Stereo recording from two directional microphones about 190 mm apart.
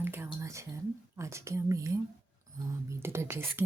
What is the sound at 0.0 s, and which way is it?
Whispering, 10° right (ahead or behind).